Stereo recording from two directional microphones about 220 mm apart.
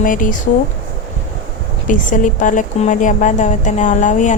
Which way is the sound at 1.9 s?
35° left (ahead or behind).